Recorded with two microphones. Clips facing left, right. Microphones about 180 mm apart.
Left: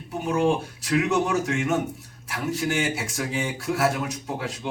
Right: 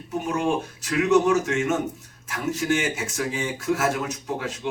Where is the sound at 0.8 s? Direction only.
35° left (ahead or behind).